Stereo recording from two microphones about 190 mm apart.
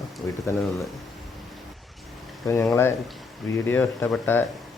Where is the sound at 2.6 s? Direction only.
10° left (ahead or behind).